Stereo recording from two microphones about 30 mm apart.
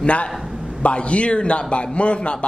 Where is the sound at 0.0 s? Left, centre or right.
Left.